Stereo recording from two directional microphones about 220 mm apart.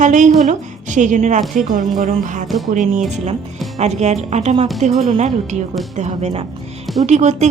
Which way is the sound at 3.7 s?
30° right (ahead or behind).